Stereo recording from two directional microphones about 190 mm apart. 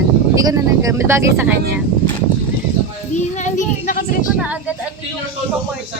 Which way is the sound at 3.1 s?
40° left (ahead or behind).